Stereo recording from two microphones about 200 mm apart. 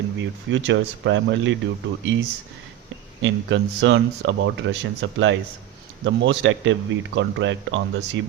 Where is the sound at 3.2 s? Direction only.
65° right (ahead or behind).